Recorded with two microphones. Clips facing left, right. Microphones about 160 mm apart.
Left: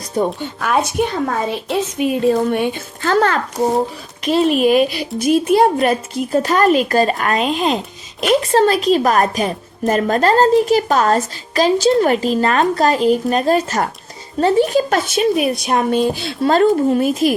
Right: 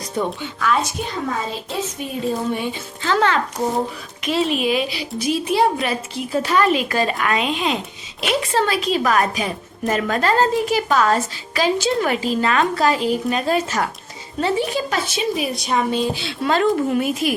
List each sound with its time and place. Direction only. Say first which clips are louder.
0.2 s a woman's voice: left 4 dB; 50° left (ahead or behind)
2.0 s a woman's voice: left 10 dB; 75° left (ahead or behind); by 17.3 s 40° left (ahead or behind)